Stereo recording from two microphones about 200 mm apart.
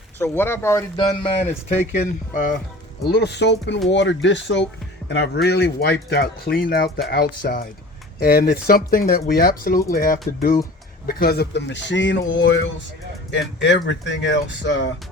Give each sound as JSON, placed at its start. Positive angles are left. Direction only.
{"t": 0.2, "sound": "speech", "side_deg": 10}
{"t": 2.3, "sound": "speech", "side_deg": 45}
{"t": 3.0, "sound": "speech", "side_deg": 55}